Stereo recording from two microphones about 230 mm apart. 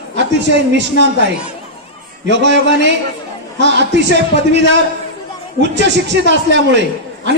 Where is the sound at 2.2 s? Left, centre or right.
Right.